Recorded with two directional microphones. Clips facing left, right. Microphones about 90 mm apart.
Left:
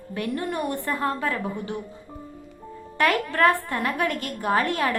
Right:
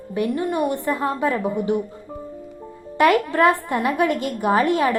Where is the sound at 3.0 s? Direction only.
20° right (ahead or behind).